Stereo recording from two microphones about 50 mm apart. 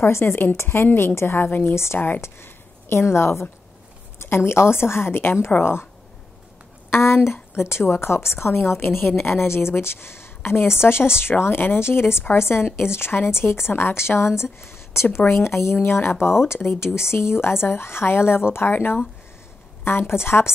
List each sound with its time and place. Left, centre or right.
0.0 s a woman's voice: left
2.2 s a woman's voice: left
6.9 s a woman's voice: left